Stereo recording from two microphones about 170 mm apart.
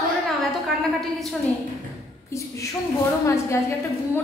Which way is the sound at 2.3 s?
15° left (ahead or behind).